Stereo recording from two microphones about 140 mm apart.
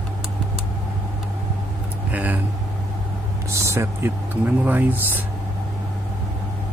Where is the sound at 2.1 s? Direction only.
10° right (ahead or behind).